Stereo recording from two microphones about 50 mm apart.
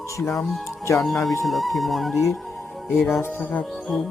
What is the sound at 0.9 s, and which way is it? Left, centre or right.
Music, centre.